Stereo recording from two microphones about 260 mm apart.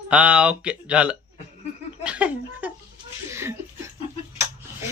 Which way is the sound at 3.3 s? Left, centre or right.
Centre.